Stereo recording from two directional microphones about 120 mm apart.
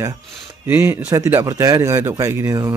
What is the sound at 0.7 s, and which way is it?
A man's voice, 20° right (ahead or behind).